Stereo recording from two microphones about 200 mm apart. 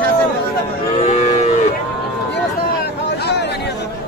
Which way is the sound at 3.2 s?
55° left (ahead or behind).